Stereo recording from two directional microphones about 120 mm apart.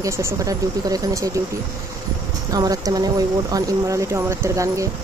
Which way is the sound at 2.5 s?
30° right (ahead or behind).